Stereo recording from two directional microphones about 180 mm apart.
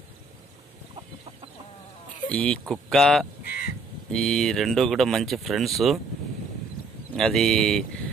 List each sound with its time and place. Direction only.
2.2 s speech: 5° left (ahead or behind)
3.4 s crow: 60° left (ahead or behind)
4.1 s speech: centre (ahead or behind)
7.2 s speech: centre (ahead or behind)